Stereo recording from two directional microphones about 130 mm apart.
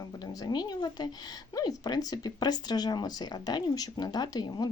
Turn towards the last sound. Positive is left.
turn(degrees=30)  # may be behind; listen again after turning